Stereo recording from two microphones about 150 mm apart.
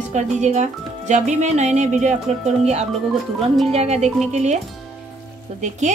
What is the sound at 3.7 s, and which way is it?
Speech, 45° right (ahead or behind).